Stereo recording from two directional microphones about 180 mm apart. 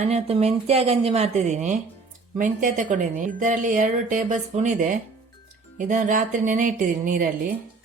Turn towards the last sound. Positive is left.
turn(degrees=-50)  # may be behind; listen again after turning